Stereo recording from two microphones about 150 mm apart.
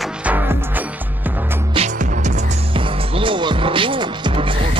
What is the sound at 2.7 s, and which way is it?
Music, 35° right (ahead or behind).